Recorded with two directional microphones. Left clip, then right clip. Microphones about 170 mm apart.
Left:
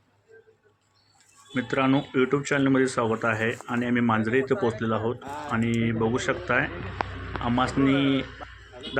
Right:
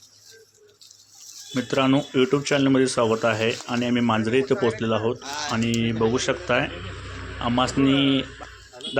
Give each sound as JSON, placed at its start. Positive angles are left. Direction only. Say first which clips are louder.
{"t": 1.5, "sound": "speech", "louder": "right 3 dB", "side_deg": -20}